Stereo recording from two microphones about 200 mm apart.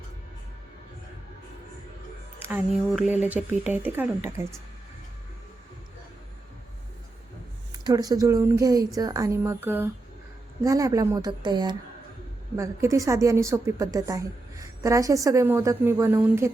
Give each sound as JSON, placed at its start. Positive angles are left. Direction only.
{"t": 2.4, "sound": "a woman's voice", "side_deg": -10}
{"t": 7.9, "sound": "a woman's voice", "side_deg": -20}